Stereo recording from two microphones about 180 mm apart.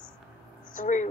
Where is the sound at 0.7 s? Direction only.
45° left (ahead or behind).